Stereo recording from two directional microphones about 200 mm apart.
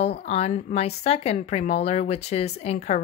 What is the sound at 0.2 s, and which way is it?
A woman's voice, 35° left (ahead or behind).